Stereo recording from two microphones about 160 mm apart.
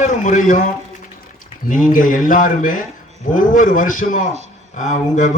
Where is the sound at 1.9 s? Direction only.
55° left (ahead or behind).